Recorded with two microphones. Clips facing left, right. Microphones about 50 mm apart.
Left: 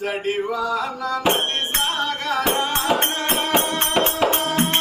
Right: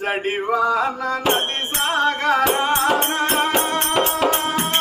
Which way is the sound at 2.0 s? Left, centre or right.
Right.